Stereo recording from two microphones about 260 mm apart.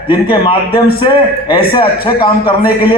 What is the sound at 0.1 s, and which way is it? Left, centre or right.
Speech, centre.